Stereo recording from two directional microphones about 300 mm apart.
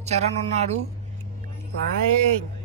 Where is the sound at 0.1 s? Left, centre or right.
Right.